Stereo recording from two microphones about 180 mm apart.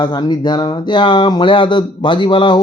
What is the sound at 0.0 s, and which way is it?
A man's voice, 25° left (ahead or behind).